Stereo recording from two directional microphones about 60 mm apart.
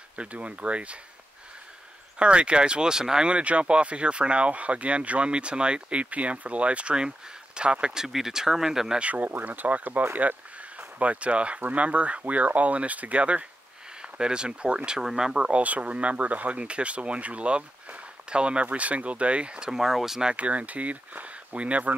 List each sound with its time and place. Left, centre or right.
0.1 s speech: right
2.1 s speech: centre
9.0 s speech: right; by 20.3 s centre
20.3 s speech: right